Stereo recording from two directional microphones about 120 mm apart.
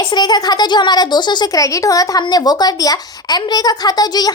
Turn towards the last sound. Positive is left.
turn(degrees=35)  # may be behind; listen again after turning